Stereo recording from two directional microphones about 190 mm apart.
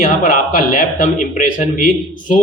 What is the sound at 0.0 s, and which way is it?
A man's voice, 45° left (ahead or behind).